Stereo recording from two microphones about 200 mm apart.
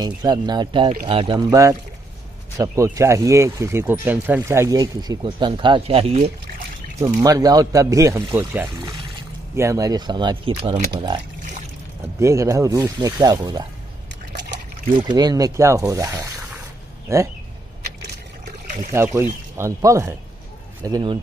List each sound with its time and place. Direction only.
0.0 s speech: 20° right (ahead or behind)
7.2 s speech: 20° right (ahead or behind)
12.2 s speech: 15° right (ahead or behind)
15.0 s speech: 20° right (ahead or behind)
18.4 s trickle: 40° right (ahead or behind)
19.5 s speech: 15° right (ahead or behind)